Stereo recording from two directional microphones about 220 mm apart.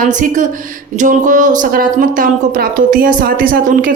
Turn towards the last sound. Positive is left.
turn(degrees=-40)  # may be behind; listen again after turning